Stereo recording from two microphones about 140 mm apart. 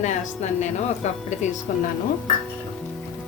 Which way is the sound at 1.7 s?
75° left (ahead or behind).